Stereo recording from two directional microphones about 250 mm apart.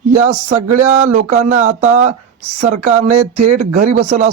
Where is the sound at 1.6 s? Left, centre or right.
Right.